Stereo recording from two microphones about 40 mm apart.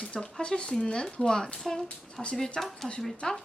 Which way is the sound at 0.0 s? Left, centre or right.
Left.